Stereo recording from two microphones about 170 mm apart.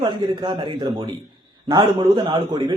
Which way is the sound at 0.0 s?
30° right (ahead or behind).